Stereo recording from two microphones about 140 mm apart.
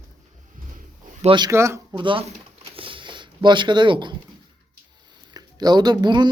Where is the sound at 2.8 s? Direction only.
35° right (ahead or behind).